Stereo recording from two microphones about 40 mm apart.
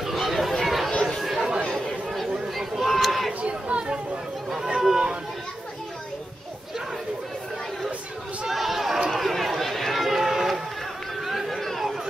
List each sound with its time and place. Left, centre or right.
0.0 s chatter: centre
2.5 s a sound: centre
3.4 s chatter: right
4.6 s a sound: centre
8.5 s chatter: centre
9.1 s run: centre